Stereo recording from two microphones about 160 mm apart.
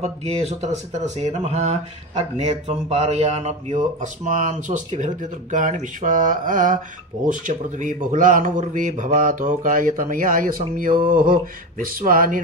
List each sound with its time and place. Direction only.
0.0 s a man's voice: 40° right (ahead or behind); by 12.4 s 60° right (ahead or behind)